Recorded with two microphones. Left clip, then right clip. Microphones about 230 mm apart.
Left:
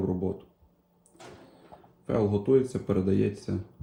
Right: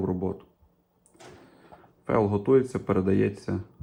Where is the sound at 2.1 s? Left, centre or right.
Centre.